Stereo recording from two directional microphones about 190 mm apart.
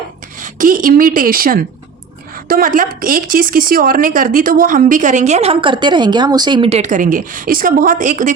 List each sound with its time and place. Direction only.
0.3 s speech: 45° right (ahead or behind)